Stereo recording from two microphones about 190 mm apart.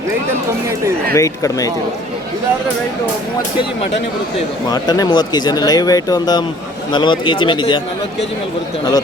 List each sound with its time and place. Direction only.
1.1 s speech: 15° left (ahead or behind)
4.7 s speech: 20° left (ahead or behind)